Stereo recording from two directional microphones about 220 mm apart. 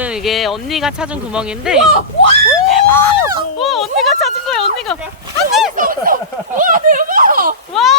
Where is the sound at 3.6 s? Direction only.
Centre (ahead or behind).